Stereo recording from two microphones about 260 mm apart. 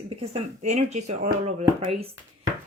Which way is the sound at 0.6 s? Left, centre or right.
Right.